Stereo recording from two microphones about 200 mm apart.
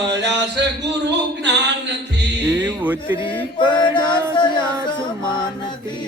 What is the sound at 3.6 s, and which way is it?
Music, 25° left (ahead or behind).